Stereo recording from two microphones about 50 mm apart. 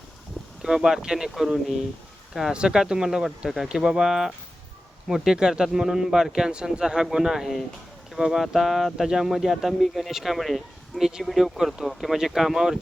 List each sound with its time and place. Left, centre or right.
0.6 s speech: centre
2.5 s speech: centre